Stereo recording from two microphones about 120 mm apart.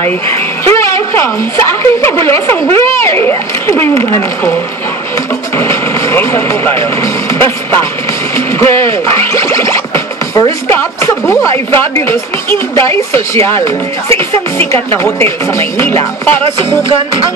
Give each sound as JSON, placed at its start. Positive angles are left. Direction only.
{"t": 0.0, "sound": "a woman's voice", "side_deg": 20}
{"t": 5.6, "sound": "speech", "side_deg": 20}
{"t": 8.4, "sound": "music", "side_deg": 25}
{"t": 10.7, "sound": "a woman's voice", "side_deg": 20}